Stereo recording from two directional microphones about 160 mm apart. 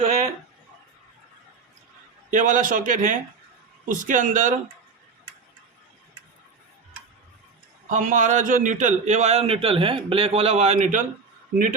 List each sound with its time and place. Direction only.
2.3 s a man's voice: 55° right (ahead or behind)
7.9 s a man's voice: 50° right (ahead or behind)